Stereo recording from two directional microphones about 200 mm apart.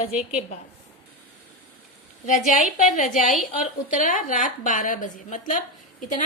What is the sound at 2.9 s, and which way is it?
A woman's voice, 40° left (ahead or behind).